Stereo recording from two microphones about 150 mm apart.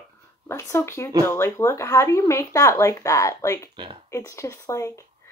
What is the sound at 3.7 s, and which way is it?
Speech, 30° right (ahead or behind).